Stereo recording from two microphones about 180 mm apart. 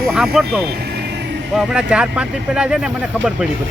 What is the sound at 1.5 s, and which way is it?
Speech, 5° right (ahead or behind).